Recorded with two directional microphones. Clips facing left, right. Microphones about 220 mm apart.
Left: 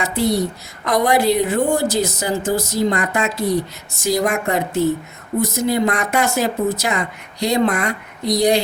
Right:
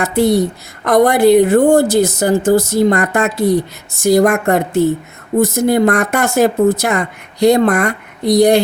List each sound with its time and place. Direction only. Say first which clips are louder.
0.0 s speech: right 6 dB; 55° right (ahead or behind)